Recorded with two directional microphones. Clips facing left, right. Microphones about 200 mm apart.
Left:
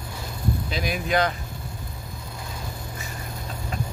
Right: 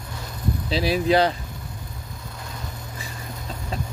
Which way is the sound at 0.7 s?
30° right (ahead or behind).